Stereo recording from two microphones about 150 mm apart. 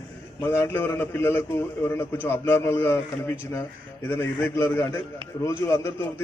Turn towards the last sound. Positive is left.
turn(degrees=15)  # may be behind; listen again after turning